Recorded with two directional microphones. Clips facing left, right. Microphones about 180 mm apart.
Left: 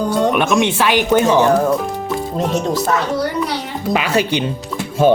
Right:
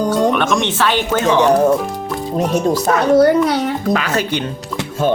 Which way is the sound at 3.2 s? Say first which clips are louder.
Right 8 dB; 55° right (ahead or behind).